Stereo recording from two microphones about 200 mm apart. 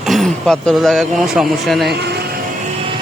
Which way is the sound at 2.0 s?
55° right (ahead or behind).